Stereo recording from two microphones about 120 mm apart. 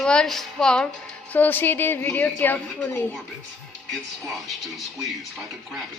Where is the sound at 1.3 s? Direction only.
15° left (ahead or behind).